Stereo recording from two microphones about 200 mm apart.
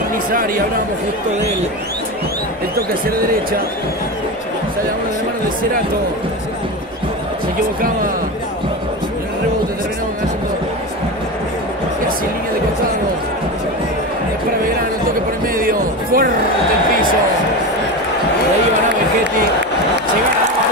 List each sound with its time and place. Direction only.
0.3 s speech: 45° right (ahead or behind)
2.7 s speech: 50° right (ahead or behind)
15.5 s speech: 45° right (ahead or behind)